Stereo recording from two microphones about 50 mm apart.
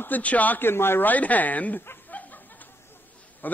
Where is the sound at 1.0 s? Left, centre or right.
Left.